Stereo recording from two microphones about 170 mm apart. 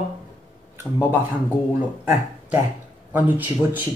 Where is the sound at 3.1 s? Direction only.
10° right (ahead or behind).